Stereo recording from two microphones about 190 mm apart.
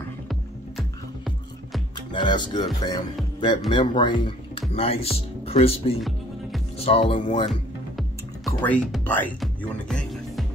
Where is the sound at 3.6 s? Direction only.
25° left (ahead or behind).